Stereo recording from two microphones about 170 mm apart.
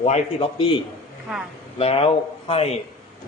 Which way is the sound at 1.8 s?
35° left (ahead or behind).